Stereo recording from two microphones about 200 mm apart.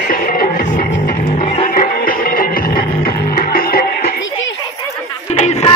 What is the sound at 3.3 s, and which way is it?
Music, 45° left (ahead or behind).